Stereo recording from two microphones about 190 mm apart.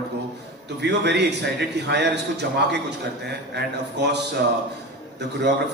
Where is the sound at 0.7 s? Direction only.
65° right (ahead or behind).